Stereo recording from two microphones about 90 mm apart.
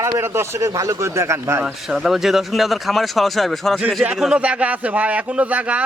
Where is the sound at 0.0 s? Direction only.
30° right (ahead or behind).